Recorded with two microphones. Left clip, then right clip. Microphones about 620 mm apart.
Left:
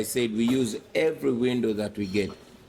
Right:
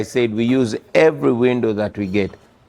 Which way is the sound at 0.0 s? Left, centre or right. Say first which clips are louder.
Right 8 dB; right.